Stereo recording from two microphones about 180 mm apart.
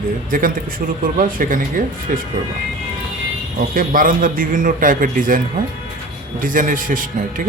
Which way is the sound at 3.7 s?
50° right (ahead or behind).